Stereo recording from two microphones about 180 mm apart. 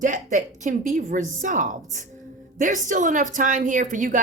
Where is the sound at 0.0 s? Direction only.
45° right (ahead or behind).